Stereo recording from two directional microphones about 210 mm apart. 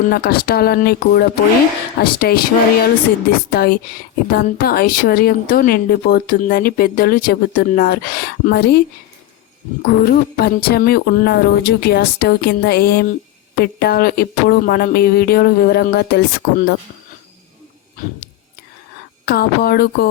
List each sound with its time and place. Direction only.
0.1 s speech: 45° left (ahead or behind)
3.5 s speech: 45° left (ahead or behind)
9.8 s speech: 45° left (ahead or behind)
18.0 s speech: 40° left (ahead or behind)
19.2 s speech: 50° left (ahead or behind)